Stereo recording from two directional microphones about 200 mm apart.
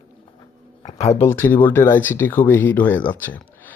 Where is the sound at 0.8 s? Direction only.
35° left (ahead or behind).